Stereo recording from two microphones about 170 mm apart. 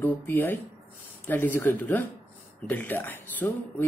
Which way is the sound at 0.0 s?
10° left (ahead or behind).